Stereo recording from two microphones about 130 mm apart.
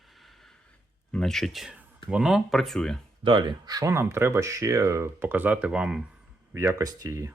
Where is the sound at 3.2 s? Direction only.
40° right (ahead or behind); by 6.0 s 10° right (ahead or behind).